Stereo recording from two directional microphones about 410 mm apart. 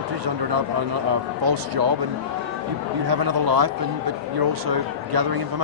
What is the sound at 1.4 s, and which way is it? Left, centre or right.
Speech, right.